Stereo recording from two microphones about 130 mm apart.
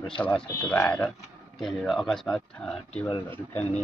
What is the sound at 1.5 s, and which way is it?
A man's voice, centre (ahead or behind).